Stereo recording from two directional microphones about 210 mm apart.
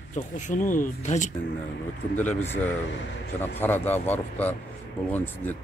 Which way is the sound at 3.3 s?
10° left (ahead or behind).